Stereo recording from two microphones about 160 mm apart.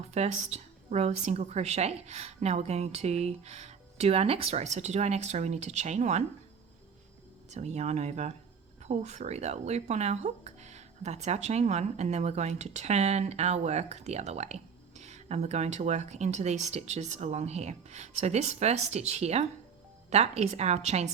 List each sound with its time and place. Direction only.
0.1 s speech: 45° right (ahead or behind)
7.5 s speech: 45° right (ahead or behind)